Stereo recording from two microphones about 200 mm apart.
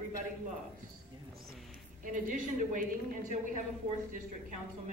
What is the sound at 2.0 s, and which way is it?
A woman's voice, 40° right (ahead or behind).